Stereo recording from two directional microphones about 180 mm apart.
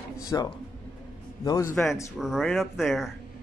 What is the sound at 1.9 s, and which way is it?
Speech, centre (ahead or behind).